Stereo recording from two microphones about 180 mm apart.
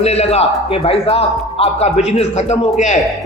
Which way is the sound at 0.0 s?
35° left (ahead or behind).